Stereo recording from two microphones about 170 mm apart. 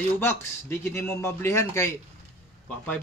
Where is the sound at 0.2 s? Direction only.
15° left (ahead or behind).